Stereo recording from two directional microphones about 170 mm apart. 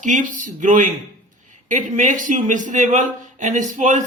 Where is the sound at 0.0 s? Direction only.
50° right (ahead or behind).